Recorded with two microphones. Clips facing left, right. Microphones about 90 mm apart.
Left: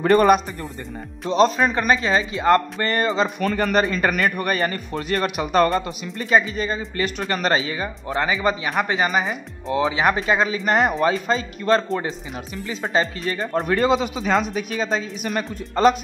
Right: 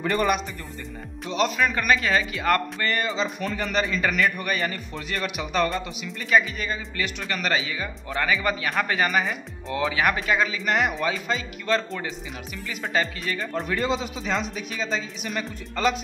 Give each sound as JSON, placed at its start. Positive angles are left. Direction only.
{"t": 0.0, "sound": "speech", "side_deg": 45}
{"t": 1.3, "sound": "a man's voice", "side_deg": 35}
{"t": 3.3, "sound": "speech", "side_deg": 55}
{"t": 6.3, "sound": "speech", "side_deg": 30}